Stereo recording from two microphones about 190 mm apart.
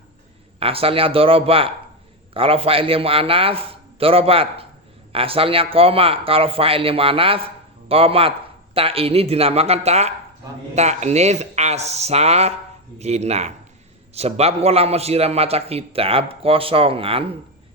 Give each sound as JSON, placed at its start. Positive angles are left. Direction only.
{"t": 0.6, "sound": "a man's voice", "side_deg": -30}